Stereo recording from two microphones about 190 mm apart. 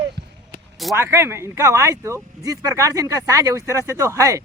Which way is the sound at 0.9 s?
15° right (ahead or behind).